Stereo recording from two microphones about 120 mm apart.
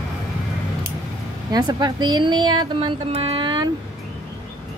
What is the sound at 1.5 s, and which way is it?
Speech, 35° right (ahead or behind).